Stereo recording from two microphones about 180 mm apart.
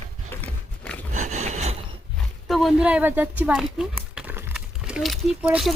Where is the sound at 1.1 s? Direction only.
40° right (ahead or behind).